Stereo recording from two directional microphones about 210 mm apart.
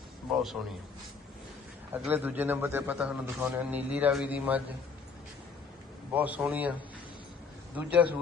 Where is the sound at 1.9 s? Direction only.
10° right (ahead or behind).